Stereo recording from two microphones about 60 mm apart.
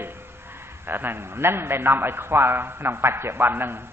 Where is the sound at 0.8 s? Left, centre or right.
Right.